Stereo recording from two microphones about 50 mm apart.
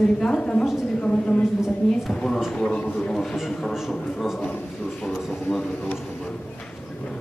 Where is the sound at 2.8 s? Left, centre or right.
Left.